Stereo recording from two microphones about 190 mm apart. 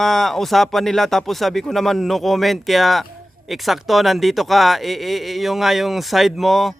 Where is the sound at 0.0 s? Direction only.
Centre (ahead or behind).